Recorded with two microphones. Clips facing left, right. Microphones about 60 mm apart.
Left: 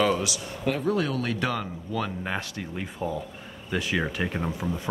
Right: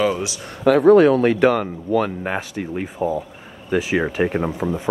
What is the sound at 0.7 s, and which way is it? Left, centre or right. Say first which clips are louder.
Speech: right 14 dB; right.